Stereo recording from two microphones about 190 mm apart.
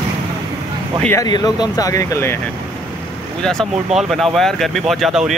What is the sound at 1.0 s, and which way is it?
Speech, 10° left (ahead or behind).